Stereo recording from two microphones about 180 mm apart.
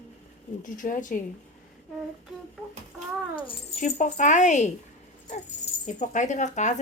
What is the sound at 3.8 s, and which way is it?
Speech, 45° left (ahead or behind).